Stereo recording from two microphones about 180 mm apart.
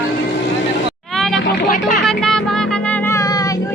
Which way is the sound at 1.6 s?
50° left (ahead or behind).